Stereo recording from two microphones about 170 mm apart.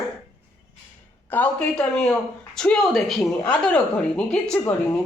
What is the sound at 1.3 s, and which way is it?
Speech, 10° left (ahead or behind).